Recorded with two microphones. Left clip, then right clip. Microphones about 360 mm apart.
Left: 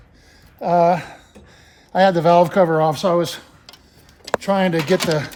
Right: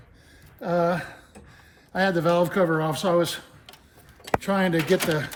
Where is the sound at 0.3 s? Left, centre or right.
Centre.